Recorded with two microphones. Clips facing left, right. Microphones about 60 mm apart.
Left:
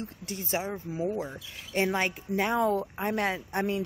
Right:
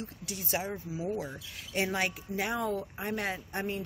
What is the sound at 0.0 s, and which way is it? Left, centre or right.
Speech, left.